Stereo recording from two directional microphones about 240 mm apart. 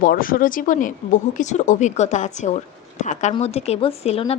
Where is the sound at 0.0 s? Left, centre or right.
Left.